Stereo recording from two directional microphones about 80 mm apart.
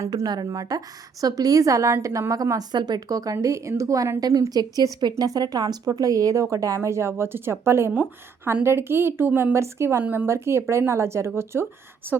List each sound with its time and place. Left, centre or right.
0.3 s a woman's voice: right
2.7 s speech: right
4.2 s a woman's voice: right
10.0 s a woman's voice: right
10.2 s a woman's voice: right